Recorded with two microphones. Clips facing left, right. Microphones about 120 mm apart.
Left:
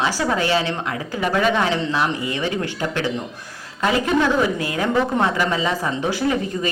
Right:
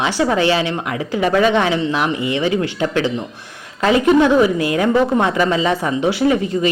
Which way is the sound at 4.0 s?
20° right (ahead or behind).